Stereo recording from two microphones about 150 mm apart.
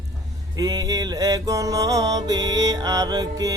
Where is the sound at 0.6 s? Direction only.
25° right (ahead or behind).